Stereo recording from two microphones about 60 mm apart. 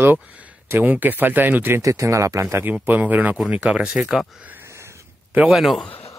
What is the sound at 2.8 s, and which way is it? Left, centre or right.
Speech, right.